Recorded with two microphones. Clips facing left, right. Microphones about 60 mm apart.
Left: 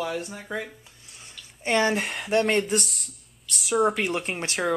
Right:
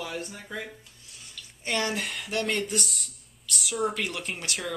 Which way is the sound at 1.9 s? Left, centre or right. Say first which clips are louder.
Left 5 dB; centre.